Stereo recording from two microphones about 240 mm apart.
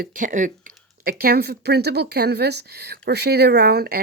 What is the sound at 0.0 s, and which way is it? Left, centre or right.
Speech, right.